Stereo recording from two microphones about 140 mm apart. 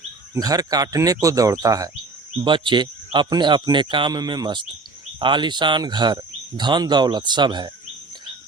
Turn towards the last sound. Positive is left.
turn(degrees=-30)  # may be behind; listen again after turning